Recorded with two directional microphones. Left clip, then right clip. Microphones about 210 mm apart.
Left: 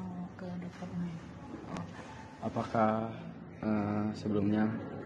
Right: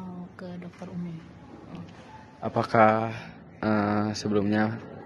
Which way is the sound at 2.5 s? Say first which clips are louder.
Right 10 dB; 55° right (ahead or behind).